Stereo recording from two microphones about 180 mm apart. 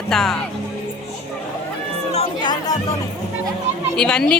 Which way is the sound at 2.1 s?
30° left (ahead or behind).